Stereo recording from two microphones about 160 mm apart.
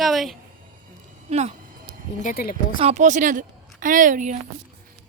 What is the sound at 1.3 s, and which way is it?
Speech, 45° right (ahead or behind).